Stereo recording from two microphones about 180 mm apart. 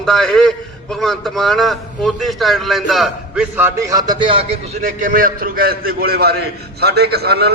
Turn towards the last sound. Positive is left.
turn(degrees=-65)  # may be behind; listen again after turning